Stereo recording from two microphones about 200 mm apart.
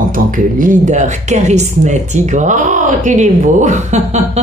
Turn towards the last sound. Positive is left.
turn(degrees=-35)  # may be behind; listen again after turning